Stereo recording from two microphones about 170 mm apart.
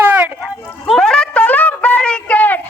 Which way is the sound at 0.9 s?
5° left (ahead or behind).